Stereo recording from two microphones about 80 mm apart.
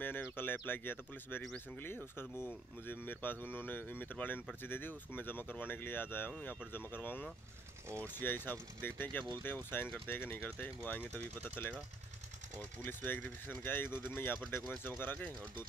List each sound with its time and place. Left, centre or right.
0.0 s speech: left